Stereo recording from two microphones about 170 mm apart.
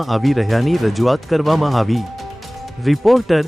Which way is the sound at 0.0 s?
Centre (ahead or behind).